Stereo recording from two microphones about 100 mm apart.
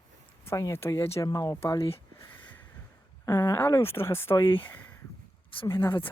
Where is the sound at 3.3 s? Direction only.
30° left (ahead or behind).